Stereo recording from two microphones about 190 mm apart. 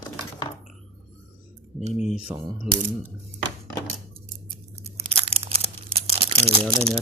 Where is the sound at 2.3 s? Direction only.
10° right (ahead or behind).